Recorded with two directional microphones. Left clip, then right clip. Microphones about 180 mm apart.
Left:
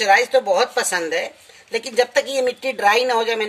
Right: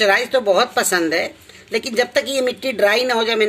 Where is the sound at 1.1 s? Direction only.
50° left (ahead or behind).